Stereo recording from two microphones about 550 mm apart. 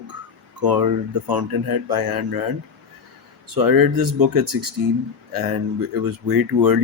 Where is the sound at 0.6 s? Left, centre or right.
Right.